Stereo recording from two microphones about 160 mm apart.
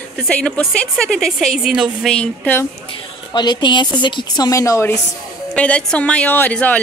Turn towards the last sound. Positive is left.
turn(degrees=10)  # may be behind; listen again after turning